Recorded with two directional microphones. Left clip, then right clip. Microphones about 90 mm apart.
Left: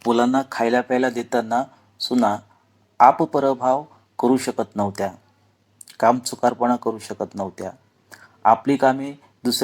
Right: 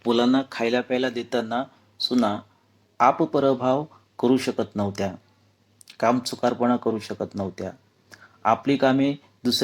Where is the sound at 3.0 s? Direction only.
25° right (ahead or behind).